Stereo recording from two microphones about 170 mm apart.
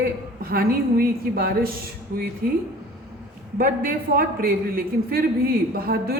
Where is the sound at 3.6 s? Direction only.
60° right (ahead or behind).